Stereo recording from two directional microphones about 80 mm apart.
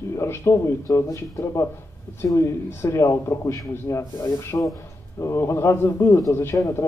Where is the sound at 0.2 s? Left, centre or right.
Left.